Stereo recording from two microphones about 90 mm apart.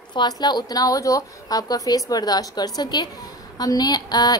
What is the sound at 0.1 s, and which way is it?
A woman's voice, 50° left (ahead or behind).